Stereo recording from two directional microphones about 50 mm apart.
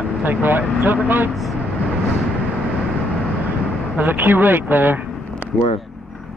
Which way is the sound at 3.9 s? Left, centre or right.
Right.